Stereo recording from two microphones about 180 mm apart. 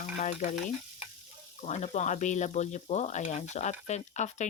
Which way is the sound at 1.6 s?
40° left (ahead or behind).